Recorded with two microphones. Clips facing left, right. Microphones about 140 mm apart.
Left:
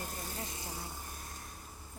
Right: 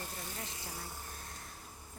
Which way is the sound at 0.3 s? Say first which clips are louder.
Left 2 dB; 25° left (ahead or behind).